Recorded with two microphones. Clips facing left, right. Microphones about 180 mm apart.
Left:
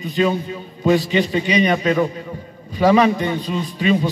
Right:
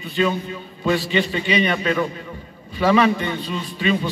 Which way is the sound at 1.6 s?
40° left (ahead or behind).